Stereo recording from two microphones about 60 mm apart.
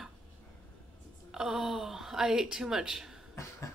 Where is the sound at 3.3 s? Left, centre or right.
Left.